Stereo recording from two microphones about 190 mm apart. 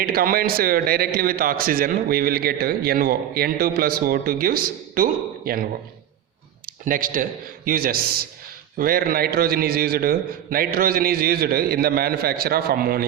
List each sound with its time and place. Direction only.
0.0 s a man's voice: 50° right (ahead or behind)
6.7 s a man's voice: 45° right (ahead or behind)